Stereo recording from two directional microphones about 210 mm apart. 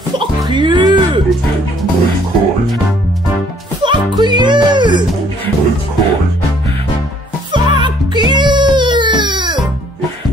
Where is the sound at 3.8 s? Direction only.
20° right (ahead or behind).